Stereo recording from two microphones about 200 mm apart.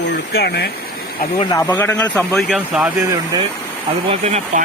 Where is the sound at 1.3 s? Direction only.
20° left (ahead or behind); by 2.9 s 5° right (ahead or behind).